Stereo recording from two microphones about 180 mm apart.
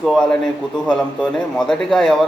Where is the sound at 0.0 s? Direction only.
Centre (ahead or behind).